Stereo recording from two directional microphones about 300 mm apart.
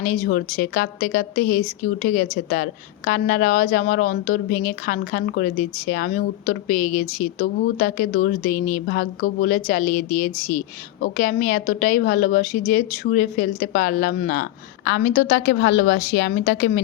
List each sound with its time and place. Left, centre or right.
0.0 s a woman's voice: left